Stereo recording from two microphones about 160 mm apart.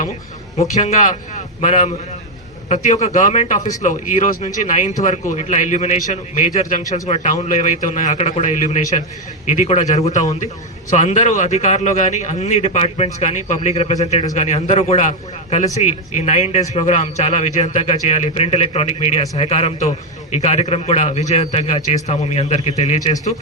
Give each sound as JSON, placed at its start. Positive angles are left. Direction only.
{"t": 0.8, "sound": "a man's voice", "side_deg": 45}